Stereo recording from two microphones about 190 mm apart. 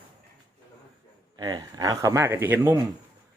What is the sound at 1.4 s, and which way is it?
Speech, 20° right (ahead or behind).